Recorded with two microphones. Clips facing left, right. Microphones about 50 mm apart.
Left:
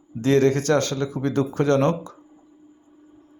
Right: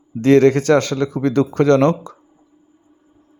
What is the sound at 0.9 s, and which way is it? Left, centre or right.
Speech, right.